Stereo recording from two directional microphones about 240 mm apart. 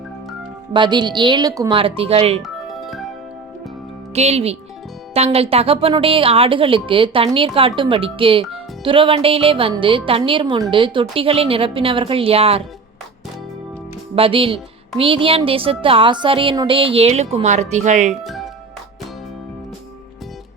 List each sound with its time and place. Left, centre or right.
0.7 s a woman's voice: centre
2.4 s music: centre
4.1 s a woman's voice: right
14.2 s a woman's voice: right
18.2 s speech: centre